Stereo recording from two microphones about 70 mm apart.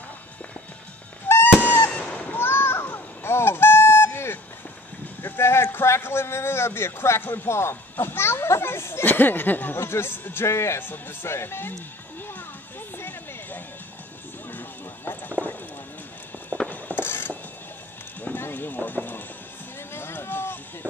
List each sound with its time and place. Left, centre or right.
1.3 s music: left
1.9 s honk: centre; by 4.4 s left
5.2 s a man's voice: left
12.9 s a sound: left
15.0 s clip-clop: left
16.6 s a sound: left
18.2 s clip-clop: left
19.9 s run: left